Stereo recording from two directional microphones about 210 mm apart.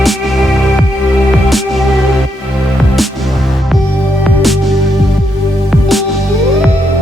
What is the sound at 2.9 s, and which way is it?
Music, centre (ahead or behind).